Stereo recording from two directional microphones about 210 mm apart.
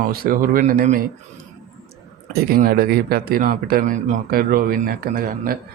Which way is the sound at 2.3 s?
45° right (ahead or behind).